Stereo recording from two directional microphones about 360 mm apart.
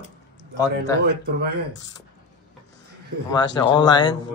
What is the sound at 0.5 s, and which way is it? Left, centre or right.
Speech, centre.